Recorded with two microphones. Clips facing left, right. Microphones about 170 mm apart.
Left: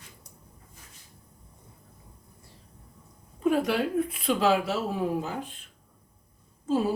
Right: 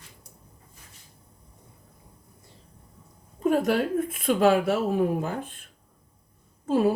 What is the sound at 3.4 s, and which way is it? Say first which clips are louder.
Speech: right 2 dB; 45° right (ahead or behind).